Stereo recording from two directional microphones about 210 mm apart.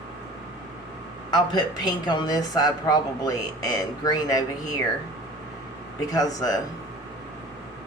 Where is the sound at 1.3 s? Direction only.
20° left (ahead or behind).